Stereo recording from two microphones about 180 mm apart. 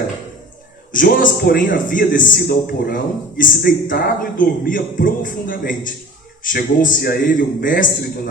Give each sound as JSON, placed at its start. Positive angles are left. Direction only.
{"t": 0.9, "sound": "a man's voice", "side_deg": 55}